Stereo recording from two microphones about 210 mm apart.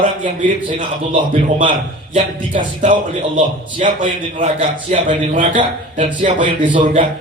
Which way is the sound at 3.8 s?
40° right (ahead or behind).